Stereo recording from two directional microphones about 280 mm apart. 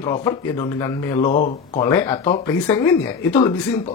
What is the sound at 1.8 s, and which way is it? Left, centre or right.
A man's voice, centre.